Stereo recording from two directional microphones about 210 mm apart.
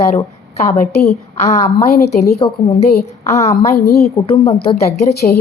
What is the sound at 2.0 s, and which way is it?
Speech, 45° left (ahead or behind).